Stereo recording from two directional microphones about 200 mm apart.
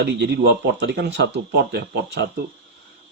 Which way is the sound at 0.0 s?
60° right (ahead or behind).